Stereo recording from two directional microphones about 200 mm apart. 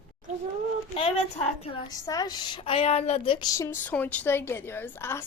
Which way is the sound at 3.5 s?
15° left (ahead or behind).